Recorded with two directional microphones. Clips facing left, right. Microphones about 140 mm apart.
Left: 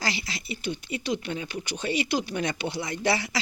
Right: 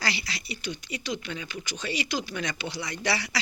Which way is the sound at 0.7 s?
55° left (ahead or behind).